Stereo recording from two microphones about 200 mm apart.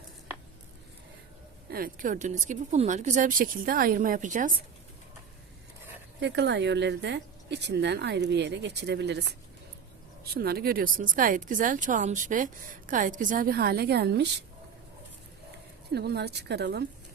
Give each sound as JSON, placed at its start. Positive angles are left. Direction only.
{"t": 1.7, "sound": "speech", "side_deg": -45}
{"t": 6.1, "sound": "speech", "side_deg": -60}
{"t": 10.3, "sound": "speech", "side_deg": -50}
{"t": 15.9, "sound": "speech", "side_deg": -55}